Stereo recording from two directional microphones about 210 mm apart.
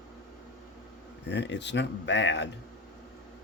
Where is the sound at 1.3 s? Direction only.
55° left (ahead or behind).